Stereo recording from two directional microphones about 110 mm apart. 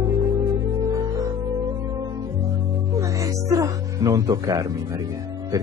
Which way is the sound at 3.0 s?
30° right (ahead or behind).